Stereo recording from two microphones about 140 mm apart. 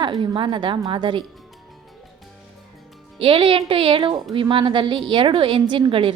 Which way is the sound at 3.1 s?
40° right (ahead or behind).